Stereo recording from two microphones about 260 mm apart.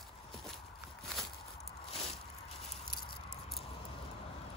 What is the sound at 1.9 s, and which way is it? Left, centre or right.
Biting, left.